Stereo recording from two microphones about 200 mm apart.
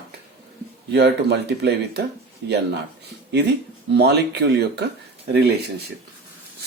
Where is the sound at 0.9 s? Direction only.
55° right (ahead or behind).